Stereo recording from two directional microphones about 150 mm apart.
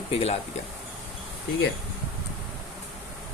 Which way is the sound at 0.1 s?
40° left (ahead or behind).